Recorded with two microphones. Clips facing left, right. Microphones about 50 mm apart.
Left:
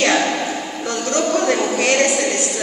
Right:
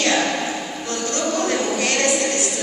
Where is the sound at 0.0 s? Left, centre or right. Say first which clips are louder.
Left 3 dB; left.